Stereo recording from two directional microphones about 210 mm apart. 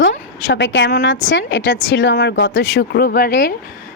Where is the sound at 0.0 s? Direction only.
60° left (ahead or behind).